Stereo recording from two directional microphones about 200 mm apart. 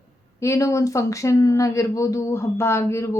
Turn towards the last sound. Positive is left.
turn(degrees=15)  # may be behind; listen again after turning